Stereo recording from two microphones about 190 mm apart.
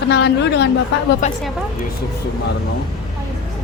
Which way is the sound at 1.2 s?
40° left (ahead or behind).